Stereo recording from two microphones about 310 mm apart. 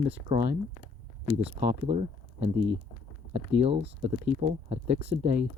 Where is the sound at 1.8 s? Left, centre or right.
Centre.